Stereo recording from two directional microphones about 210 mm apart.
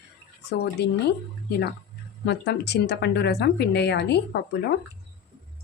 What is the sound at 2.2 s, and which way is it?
Speech, 55° left (ahead or behind).